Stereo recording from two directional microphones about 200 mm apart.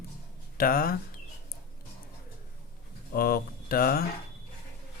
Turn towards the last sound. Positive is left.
turn(degrees=50)  # may be behind; listen again after turning